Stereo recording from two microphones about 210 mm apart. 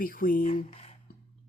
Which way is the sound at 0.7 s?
30° left (ahead or behind).